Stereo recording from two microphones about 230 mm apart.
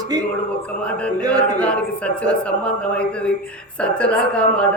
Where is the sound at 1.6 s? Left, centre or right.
Centre.